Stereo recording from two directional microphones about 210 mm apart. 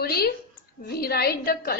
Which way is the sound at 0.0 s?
45° left (ahead or behind).